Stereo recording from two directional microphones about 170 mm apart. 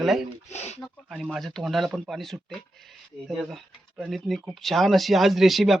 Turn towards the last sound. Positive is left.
turn(degrees=0)  # may be behind; listen again after turning